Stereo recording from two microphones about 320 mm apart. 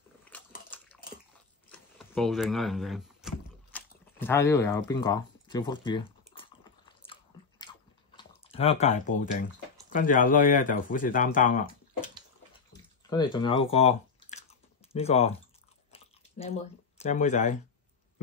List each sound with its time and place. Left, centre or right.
0.3 s biting: centre
1.7 s power windows: centre
7.1 s biting: centre
8.2 s speech: centre
12.7 s a sound: centre
14.9 s speech: centre
15.9 s chewing: centre
17.0 s speech: left